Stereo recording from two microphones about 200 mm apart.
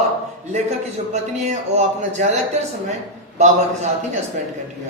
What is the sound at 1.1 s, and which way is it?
Speech, 35° right (ahead or behind).